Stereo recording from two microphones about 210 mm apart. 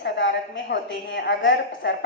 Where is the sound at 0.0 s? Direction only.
60° left (ahead or behind).